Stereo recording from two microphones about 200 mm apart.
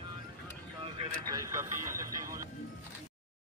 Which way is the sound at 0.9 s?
20° right (ahead or behind).